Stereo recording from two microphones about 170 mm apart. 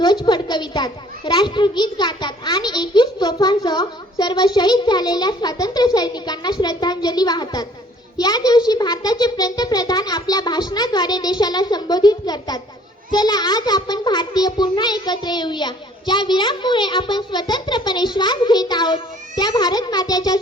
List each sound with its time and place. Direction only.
0.0 s a child's voice: 25° left (ahead or behind)